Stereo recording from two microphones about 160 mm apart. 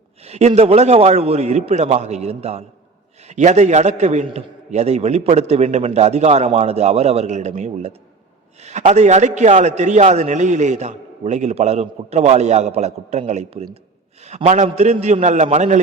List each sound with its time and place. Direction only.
0.3 s a man's voice: 45° right (ahead or behind)